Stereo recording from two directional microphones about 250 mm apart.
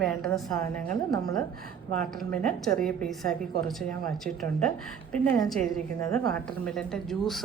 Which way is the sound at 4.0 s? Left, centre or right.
Right.